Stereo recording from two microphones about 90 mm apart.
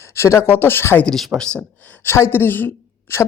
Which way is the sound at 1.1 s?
5° left (ahead or behind).